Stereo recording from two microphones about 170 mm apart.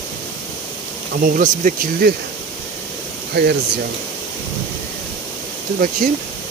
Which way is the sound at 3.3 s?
75° right (ahead or behind).